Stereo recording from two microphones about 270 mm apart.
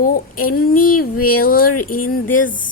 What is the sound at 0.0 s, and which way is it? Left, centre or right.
A woman's voice, left.